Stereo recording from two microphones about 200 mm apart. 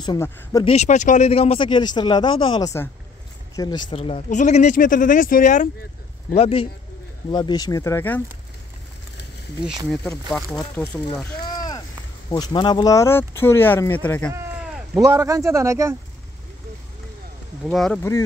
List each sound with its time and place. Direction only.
0.0 s speech: 20° left (ahead or behind)
0.7 s speech: 35° left (ahead or behind)
6.3 s speech: 30° left (ahead or behind); by 8.2 s 10° left (ahead or behind)
9.8 s speech: 5° left (ahead or behind)
10.5 s speech: 20° left (ahead or behind)
11.4 s rowboat: 20° left (ahead or behind)
12.3 s speech: 20° left (ahead or behind)
15.0 s speech: 15° right (ahead or behind)
17.6 s speech: centre (ahead or behind)